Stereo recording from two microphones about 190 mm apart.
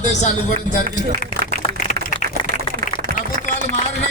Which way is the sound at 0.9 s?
50° right (ahead or behind).